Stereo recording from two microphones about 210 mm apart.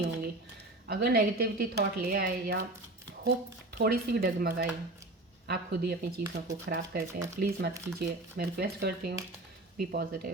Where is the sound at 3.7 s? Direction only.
50° right (ahead or behind).